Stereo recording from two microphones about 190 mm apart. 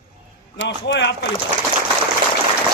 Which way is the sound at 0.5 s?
75° left (ahead or behind).